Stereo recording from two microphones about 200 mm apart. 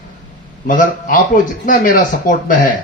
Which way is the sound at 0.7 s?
40° left (ahead or behind).